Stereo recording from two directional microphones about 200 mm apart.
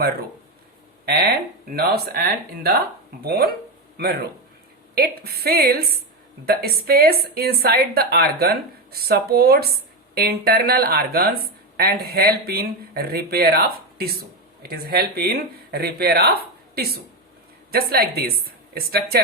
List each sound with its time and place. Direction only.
1.0 s a woman's voice: 50° right (ahead or behind)